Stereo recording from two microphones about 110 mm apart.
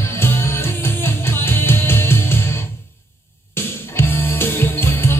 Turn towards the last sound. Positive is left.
turn(degrees=20)  # may be behind; listen again after turning